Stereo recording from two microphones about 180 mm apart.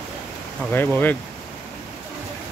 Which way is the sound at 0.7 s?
10° left (ahead or behind).